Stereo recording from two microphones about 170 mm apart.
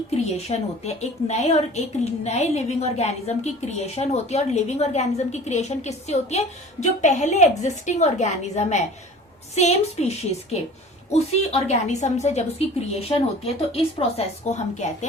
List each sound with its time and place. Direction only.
0.1 s a woman's voice: 40° left (ahead or behind)